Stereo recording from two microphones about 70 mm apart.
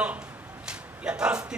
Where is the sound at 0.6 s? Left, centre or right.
Centre.